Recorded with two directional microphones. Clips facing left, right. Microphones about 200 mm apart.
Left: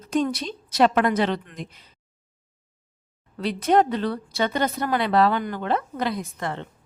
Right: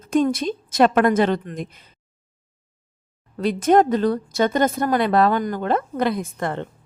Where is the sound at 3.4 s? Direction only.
50° right (ahead or behind).